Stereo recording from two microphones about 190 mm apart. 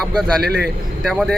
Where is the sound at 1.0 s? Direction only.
Centre (ahead or behind).